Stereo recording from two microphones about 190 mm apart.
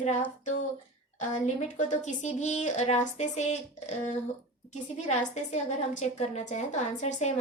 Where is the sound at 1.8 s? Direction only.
40° left (ahead or behind).